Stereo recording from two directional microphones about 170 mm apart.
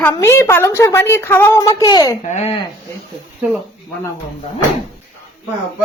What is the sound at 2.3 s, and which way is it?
Speech, 40° left (ahead or behind).